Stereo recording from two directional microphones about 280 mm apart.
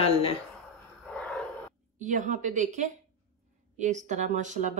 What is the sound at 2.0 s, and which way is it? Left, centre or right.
A woman's voice, right.